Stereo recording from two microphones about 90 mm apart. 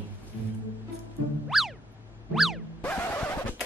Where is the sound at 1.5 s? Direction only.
Centre (ahead or behind).